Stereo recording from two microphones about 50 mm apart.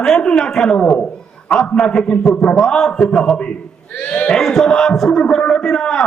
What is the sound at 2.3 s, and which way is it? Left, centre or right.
Speech, left.